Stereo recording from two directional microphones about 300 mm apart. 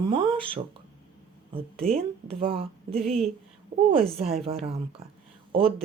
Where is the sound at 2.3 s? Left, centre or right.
Centre.